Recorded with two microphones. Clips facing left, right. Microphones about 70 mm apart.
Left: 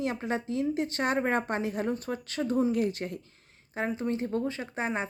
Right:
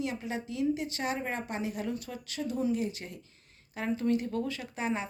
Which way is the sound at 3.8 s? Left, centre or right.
Left.